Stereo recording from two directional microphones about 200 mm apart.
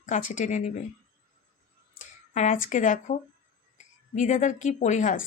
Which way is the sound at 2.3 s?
40° left (ahead or behind).